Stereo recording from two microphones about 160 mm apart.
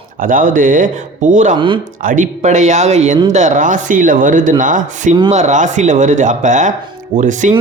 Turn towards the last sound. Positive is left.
turn(degrees=-50)  # may be behind; listen again after turning